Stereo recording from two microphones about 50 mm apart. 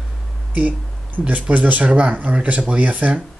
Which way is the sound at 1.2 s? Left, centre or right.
Right.